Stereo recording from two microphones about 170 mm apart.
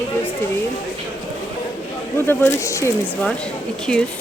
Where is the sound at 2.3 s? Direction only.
15° left (ahead or behind).